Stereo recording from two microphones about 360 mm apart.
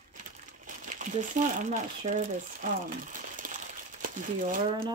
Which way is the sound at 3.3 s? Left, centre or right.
Right.